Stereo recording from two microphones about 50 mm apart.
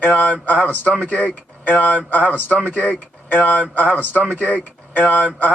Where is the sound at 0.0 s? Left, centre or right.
Left.